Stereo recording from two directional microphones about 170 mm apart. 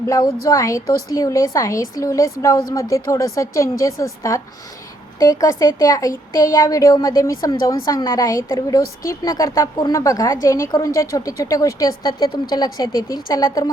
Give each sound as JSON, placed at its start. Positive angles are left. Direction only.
{"t": 0.1, "sound": "a woman's voice", "side_deg": 20}